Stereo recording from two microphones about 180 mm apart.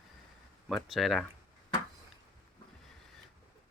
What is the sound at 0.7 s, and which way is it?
Speech, centre (ahead or behind).